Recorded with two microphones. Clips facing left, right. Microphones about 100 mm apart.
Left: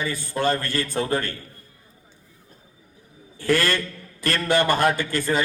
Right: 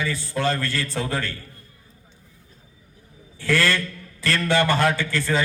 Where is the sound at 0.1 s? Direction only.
50° left (ahead or behind).